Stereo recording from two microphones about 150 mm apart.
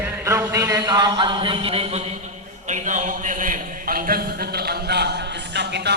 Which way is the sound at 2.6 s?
55° right (ahead or behind).